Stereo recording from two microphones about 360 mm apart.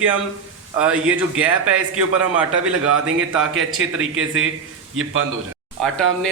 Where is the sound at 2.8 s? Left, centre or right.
Right.